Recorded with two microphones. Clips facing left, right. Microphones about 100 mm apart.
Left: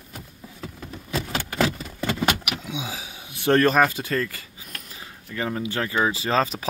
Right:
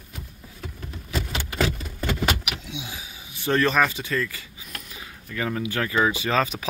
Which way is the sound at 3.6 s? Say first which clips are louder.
Left 3 dB; 45° left (ahead or behind).